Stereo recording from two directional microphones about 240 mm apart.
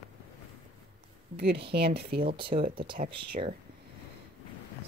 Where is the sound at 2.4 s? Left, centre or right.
Right.